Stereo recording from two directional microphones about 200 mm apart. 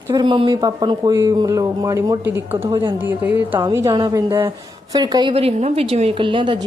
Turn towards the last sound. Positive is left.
turn(degrees=-25)  # may be behind; listen again after turning